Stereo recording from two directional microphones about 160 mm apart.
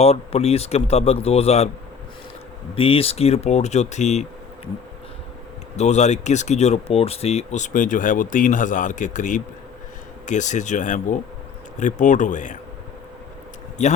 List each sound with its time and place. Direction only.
0.0 s speech: 40° left (ahead or behind)
2.7 s speech: 35° left (ahead or behind)
5.7 s speech: 45° left (ahead or behind)
13.8 s speech: 45° left (ahead or behind)